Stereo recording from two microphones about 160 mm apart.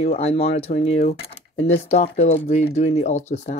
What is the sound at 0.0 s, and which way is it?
Speech, 40° left (ahead or behind).